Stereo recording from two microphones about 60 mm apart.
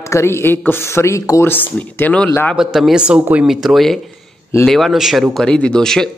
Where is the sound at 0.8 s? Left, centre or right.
Left.